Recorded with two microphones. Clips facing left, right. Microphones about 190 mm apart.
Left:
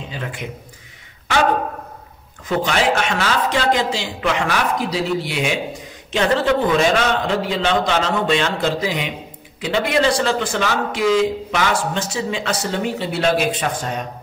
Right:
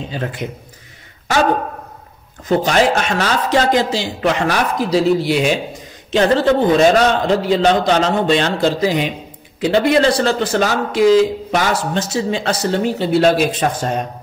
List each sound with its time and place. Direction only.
0.1 s a man's voice: 40° right (ahead or behind)
2.4 s a man's voice: 40° right (ahead or behind)